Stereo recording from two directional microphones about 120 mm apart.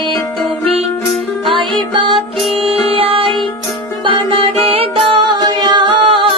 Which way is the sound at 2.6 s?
55° right (ahead or behind).